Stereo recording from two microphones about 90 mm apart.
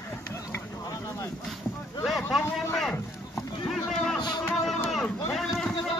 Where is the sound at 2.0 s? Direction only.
Centre (ahead or behind).